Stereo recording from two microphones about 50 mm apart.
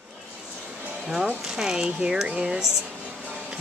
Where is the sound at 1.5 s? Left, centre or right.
Centre.